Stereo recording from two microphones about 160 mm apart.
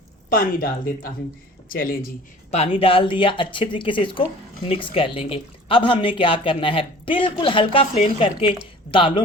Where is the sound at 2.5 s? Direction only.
40° left (ahead or behind).